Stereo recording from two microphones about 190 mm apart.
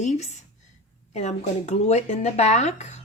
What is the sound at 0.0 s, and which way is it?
Speech, 40° left (ahead or behind).